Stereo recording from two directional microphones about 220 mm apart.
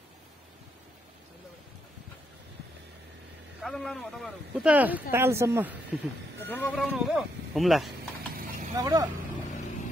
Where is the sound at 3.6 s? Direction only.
Centre (ahead or behind).